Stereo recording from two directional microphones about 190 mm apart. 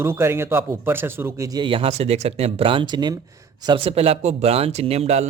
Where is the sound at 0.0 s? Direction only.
15° right (ahead or behind).